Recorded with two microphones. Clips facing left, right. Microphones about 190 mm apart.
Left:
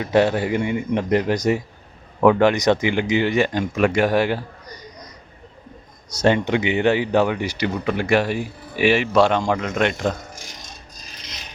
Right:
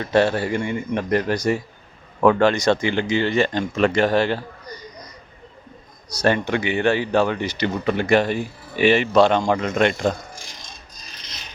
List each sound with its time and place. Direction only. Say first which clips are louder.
0.0 s speech: left 1 dB; 15° left (ahead or behind)
6.2 s speech: left 2 dB; 20° left (ahead or behind); by 10.2 s centre (ahead or behind)